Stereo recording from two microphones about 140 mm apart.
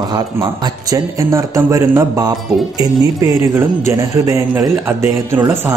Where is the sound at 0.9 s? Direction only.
20° right (ahead or behind).